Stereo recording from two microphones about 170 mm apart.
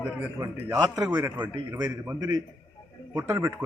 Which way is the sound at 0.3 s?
20° right (ahead or behind).